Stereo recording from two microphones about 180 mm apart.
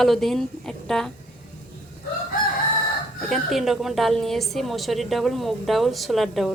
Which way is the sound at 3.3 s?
Centre (ahead or behind).